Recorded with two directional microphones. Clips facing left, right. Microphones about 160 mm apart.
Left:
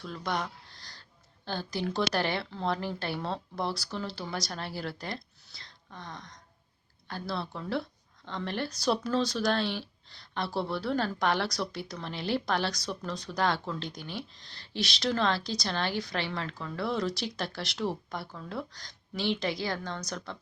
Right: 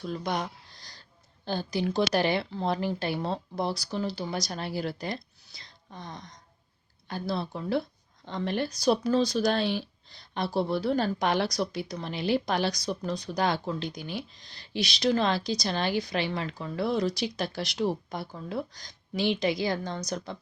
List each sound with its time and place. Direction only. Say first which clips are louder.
0.0 s speech: right 3 dB; 15° right (ahead or behind)
1.5 s speech: right 4 dB; 15° right (ahead or behind)